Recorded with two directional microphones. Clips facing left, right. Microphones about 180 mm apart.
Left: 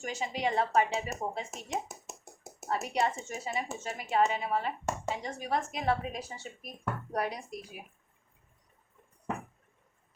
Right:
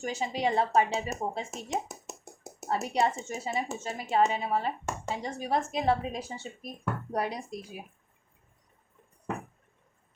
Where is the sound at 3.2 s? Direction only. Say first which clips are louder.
Right 3 dB; 30° right (ahead or behind).